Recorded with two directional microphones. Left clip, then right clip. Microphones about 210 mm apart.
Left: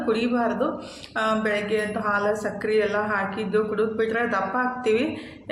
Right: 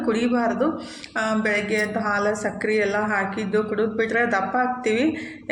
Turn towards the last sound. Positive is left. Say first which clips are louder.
# right 1 dB
turn(degrees=-15)  # may be behind; listen again after turning